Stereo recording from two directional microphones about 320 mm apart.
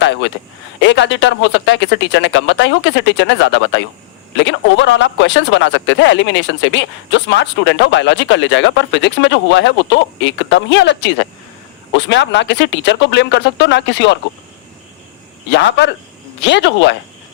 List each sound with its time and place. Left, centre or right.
0.0 s a sound: left
0.8 s speech: left
15.5 s speech: left